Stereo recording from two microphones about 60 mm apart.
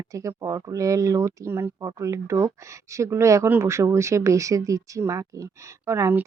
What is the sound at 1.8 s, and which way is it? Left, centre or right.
A woman's voice, right.